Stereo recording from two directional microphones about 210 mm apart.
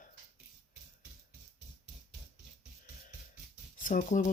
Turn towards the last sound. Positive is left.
turn(degrees=35)  # may be behind; listen again after turning